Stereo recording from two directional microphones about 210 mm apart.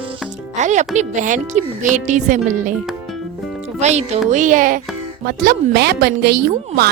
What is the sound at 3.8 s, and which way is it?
A woman's voice, 35° right (ahead or behind).